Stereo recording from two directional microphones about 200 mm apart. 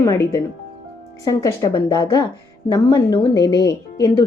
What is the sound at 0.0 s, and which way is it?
A woman's voice, 15° left (ahead or behind).